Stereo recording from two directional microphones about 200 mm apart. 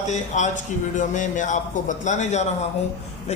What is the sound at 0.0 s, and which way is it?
A man's voice, 35° left (ahead or behind).